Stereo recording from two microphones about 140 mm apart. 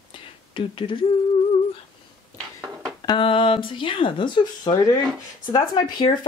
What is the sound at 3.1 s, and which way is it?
Speech, 40° left (ahead or behind).